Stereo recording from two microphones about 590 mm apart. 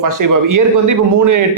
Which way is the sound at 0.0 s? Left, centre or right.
Right.